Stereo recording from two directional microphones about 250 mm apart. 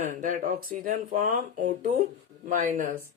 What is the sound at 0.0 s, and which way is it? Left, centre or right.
Speech, right.